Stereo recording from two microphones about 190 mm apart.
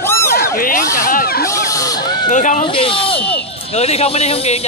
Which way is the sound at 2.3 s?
40° left (ahead or behind).